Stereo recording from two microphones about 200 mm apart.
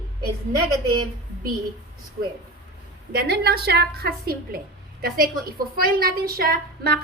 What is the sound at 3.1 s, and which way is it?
A woman's voice, 50° right (ahead or behind).